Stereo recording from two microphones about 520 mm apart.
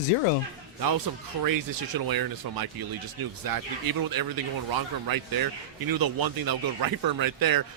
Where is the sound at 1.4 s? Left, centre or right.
Right.